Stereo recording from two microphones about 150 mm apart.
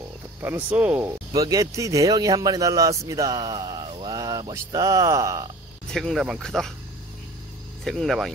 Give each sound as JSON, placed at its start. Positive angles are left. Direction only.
{"t": 0.4, "sound": "speech", "side_deg": -15}
{"t": 1.3, "sound": "a man's voice", "side_deg": -20}
{"t": 5.9, "sound": "speech", "side_deg": 5}
{"t": 7.8, "sound": "speech", "side_deg": 0}